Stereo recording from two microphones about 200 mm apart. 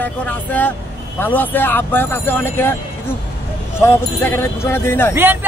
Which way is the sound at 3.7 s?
15° left (ahead or behind).